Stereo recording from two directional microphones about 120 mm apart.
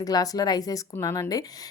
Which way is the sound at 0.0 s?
30° left (ahead or behind).